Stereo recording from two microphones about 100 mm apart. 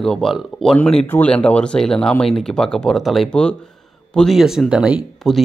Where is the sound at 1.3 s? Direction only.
10° left (ahead or behind).